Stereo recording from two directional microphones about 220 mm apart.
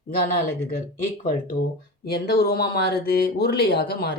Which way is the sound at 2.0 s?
45° left (ahead or behind).